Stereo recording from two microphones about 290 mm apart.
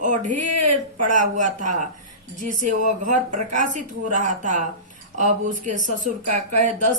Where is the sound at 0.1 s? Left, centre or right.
Right.